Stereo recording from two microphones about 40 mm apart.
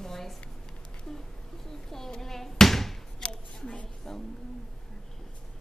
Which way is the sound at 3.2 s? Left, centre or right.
Left.